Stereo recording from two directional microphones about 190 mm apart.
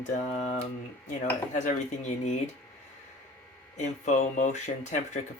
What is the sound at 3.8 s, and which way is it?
Speech, 40° left (ahead or behind).